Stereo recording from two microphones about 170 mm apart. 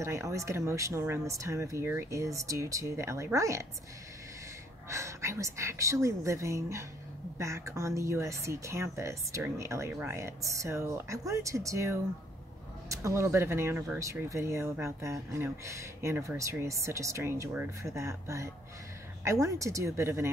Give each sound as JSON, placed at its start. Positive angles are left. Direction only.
{"t": 0.0, "sound": "speech", "side_deg": -15}
{"t": 4.8, "sound": "speech", "side_deg": -15}